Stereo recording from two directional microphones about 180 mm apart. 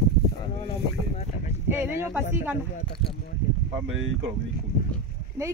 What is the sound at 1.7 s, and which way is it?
Speech, 10° right (ahead or behind).